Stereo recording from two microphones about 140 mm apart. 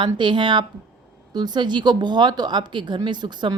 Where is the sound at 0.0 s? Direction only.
35° right (ahead or behind).